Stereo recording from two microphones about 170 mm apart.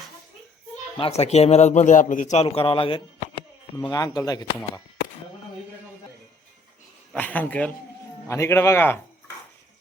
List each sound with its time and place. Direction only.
0.9 s a man's voice: 35° left (ahead or behind)
7.1 s a man's voice: 10° left (ahead or behind)